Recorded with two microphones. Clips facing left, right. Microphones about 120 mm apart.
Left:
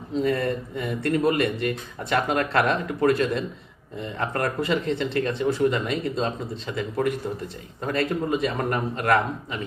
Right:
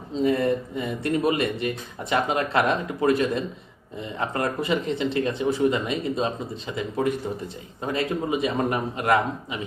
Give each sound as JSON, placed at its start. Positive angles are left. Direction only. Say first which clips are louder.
{"t": 0.1, "sound": "speech", "louder": "right 2 dB", "side_deg": -20}